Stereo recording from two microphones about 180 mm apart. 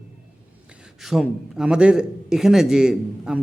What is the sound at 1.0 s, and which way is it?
A man's voice, centre (ahead or behind).